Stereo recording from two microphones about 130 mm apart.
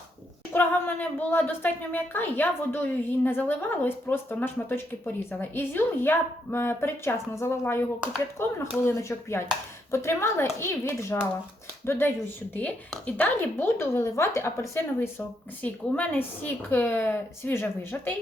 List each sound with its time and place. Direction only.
0.5 s a woman's voice: 15° left (ahead or behind)